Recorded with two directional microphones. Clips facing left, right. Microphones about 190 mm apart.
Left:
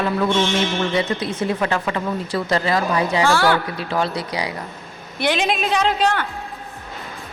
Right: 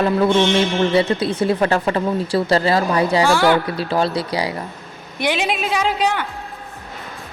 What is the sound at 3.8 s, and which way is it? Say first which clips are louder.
Speech: right 3 dB; 35° right (ahead or behind).